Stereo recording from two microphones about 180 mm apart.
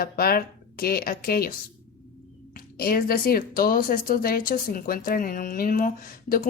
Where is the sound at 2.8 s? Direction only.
55° left (ahead or behind).